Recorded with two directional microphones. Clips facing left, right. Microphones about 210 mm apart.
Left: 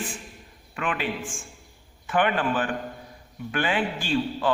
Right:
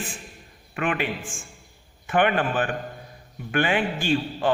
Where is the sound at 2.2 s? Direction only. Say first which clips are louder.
Right 2 dB; 60° right (ahead or behind).